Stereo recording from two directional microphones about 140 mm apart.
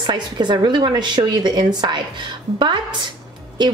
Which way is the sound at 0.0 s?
35° right (ahead or behind).